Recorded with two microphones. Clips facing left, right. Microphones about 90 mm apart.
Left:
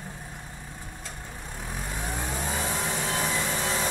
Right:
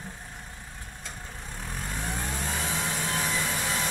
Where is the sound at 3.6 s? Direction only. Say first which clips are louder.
Left 2 dB; 10° left (ahead or behind).